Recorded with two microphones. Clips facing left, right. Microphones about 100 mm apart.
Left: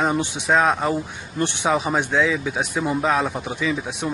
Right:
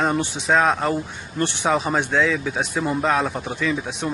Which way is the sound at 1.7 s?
5° left (ahead or behind).